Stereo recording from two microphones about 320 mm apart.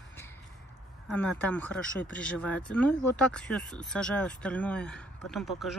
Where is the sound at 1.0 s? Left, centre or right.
Centre.